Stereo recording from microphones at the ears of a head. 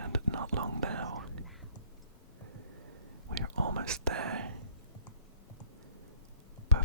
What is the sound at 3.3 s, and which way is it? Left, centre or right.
Whispering, right.